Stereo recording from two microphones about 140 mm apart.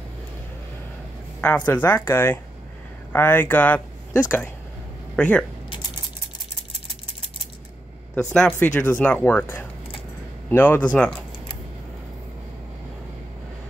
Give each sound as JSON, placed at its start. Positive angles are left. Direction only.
{"t": 1.7, "sound": "speech", "side_deg": 15}
{"t": 8.1, "sound": "speech", "side_deg": 5}